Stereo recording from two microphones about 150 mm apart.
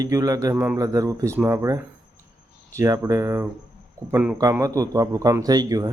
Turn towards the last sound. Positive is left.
turn(degrees=-25)  # may be behind; listen again after turning